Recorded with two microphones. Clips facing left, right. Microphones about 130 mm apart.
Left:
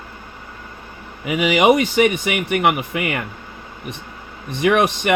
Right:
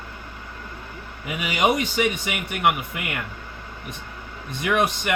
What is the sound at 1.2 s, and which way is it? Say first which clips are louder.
Speech: left 8 dB; 90° left.